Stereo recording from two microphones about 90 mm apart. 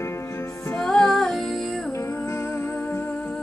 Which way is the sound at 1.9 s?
30° left (ahead or behind).